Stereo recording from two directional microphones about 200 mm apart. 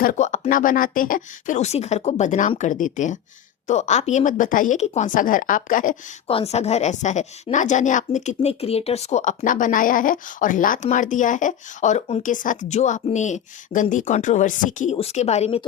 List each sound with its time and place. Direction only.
0.0 s a woman's voice: 40° left (ahead or behind)
6.2 s a woman's voice: 30° left (ahead or behind)